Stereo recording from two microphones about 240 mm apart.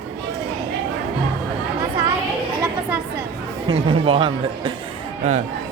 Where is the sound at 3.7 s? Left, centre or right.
Right.